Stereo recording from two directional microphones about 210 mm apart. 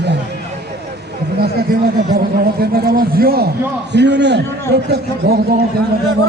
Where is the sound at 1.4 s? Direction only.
50° right (ahead or behind).